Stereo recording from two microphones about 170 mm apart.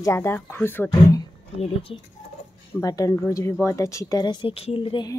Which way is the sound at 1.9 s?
35° left (ahead or behind).